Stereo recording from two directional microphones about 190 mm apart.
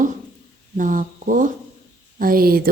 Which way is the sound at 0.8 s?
45° right (ahead or behind).